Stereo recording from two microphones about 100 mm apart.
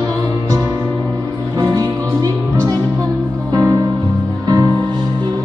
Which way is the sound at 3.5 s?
35° right (ahead or behind).